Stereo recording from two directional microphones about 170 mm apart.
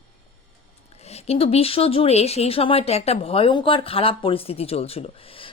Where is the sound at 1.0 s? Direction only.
35° left (ahead or behind).